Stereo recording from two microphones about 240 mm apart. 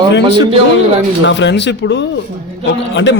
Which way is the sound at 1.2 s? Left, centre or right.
Left.